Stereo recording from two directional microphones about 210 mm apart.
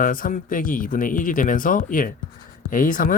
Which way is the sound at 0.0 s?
40° left (ahead or behind).